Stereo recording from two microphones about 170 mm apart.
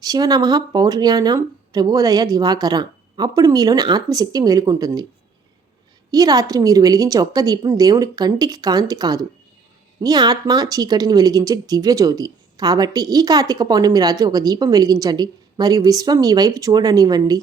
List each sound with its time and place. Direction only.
0.0 s speech: 20° right (ahead or behind)
6.1 s speech: 20° right (ahead or behind)